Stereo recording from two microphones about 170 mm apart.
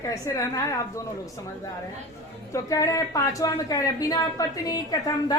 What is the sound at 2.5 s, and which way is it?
A woman's voice, 20° left (ahead or behind).